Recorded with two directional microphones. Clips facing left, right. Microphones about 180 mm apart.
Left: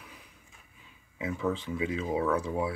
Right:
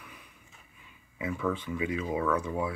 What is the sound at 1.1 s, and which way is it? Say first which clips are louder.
Speech: even; 20° left (ahead or behind).